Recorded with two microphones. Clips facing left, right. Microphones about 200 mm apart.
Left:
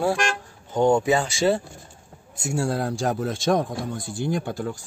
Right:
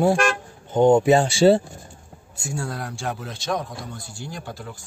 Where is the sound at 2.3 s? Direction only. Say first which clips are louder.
Left 5 dB; 25° left (ahead or behind); by 4.7 s 50° left (ahead or behind).